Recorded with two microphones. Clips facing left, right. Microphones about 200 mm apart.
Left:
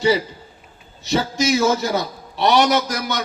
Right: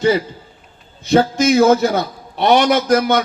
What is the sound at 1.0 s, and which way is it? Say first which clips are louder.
A man's voice: right 6 dB; 55° right (ahead or behind).